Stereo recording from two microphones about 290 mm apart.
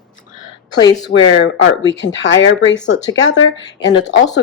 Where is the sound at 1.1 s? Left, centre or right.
Left.